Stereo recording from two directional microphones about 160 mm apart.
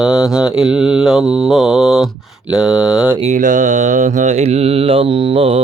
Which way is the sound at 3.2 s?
50° right (ahead or behind).